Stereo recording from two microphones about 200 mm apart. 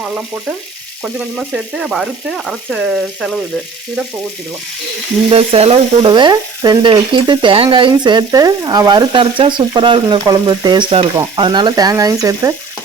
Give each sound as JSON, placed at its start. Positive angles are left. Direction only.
{"t": 1.0, "sound": "frying", "side_deg": -5}
{"t": 5.3, "sound": "frying", "side_deg": -30}